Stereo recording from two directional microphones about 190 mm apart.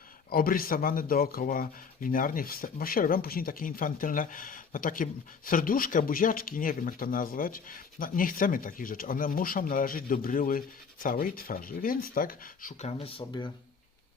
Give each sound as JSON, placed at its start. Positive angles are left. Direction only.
{"t": 0.3, "sound": "speech", "side_deg": 50}
{"t": 12.9, "sound": "speech", "side_deg": 30}